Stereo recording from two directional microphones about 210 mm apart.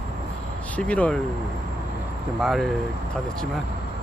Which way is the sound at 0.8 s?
5° left (ahead or behind).